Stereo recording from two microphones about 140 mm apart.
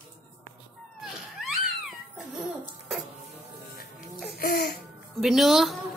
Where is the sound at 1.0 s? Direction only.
Centre (ahead or behind).